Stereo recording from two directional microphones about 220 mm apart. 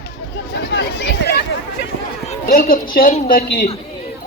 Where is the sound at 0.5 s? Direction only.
50° left (ahead or behind).